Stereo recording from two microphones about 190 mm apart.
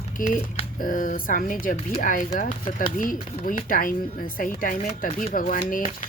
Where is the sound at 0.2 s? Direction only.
45° left (ahead or behind).